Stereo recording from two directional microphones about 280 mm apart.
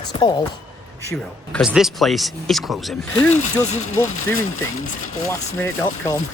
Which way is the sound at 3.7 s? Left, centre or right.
Left.